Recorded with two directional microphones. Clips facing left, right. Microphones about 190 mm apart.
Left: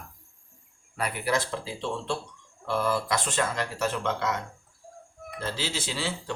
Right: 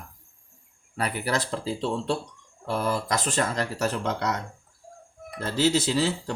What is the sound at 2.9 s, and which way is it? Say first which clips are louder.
Speech: right 1 dB; 40° right (ahead or behind).